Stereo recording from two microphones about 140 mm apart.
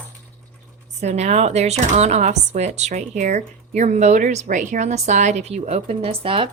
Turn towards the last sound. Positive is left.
turn(degrees=-40)  # may be behind; listen again after turning